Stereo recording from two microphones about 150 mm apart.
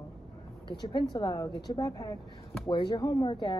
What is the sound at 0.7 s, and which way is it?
Speech, 30° left (ahead or behind).